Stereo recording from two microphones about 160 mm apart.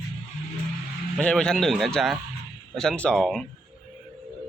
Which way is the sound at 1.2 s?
5° left (ahead or behind).